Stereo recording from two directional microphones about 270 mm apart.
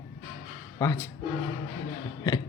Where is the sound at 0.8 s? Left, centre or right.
Centre.